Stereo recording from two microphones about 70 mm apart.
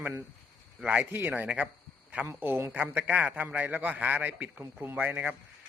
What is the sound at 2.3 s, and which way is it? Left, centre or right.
Speech, right.